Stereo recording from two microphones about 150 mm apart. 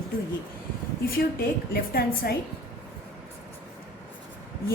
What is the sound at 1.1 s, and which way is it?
A woman's voice, 80° left.